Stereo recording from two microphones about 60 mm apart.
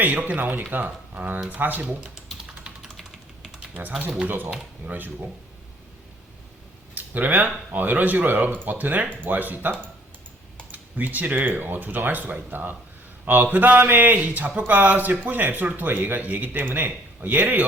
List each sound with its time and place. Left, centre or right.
0.0 s speech: right
2.8 s typing: centre
4.0 s speech: right
6.9 s speech: right